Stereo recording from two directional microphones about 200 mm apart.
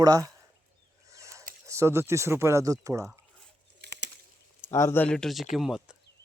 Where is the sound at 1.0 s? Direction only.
15° right (ahead or behind).